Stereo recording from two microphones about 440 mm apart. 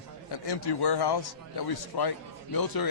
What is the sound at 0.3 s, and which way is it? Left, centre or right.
A man's voice, left.